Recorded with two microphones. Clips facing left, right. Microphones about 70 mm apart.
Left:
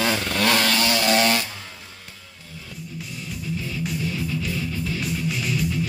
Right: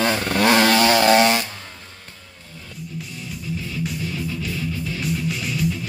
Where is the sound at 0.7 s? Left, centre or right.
Right.